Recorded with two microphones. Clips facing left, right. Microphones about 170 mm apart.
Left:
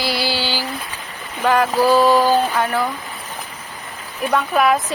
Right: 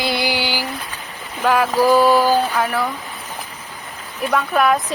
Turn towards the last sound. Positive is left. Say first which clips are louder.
# even
turn(degrees=0)  # may be behind; listen again after turning